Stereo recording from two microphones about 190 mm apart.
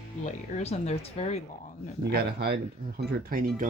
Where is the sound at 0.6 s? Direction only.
35° left (ahead or behind).